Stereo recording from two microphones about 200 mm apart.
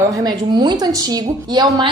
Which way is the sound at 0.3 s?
20° right (ahead or behind).